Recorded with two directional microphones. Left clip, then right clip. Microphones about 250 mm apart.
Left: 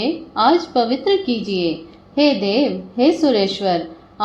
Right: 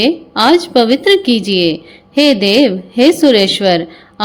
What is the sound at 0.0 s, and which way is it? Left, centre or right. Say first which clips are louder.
A woman's voice: right 5 dB; right.